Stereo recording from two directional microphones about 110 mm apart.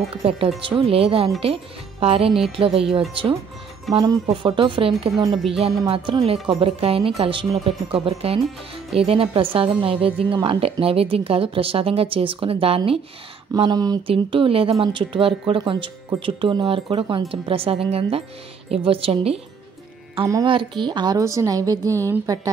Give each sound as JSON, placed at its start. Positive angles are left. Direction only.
{"t": 0.1, "sound": "speech", "side_deg": -60}
{"t": 13.6, "sound": "speech", "side_deg": -40}
{"t": 14.0, "sound": "speech", "side_deg": -55}
{"t": 20.4, "sound": "speech", "side_deg": -45}
{"t": 21.2, "sound": "a woman's voice", "side_deg": -30}